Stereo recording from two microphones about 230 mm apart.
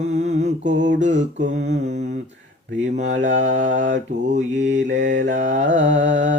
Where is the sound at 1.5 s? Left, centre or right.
Right.